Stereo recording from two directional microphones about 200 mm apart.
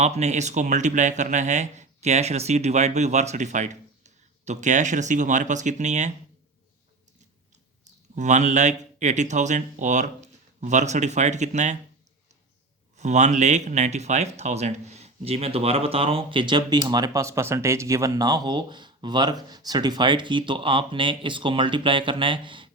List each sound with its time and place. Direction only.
0.0 s speech: 35° right (ahead or behind)
8.1 s speech: 35° right (ahead or behind)
13.0 s speech: 35° right (ahead or behind)